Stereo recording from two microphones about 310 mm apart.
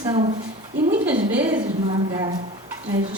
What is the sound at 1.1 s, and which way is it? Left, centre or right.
Speech, right.